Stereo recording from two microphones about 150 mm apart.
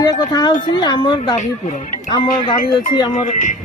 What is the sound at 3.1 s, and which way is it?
Speech, 55° left (ahead or behind).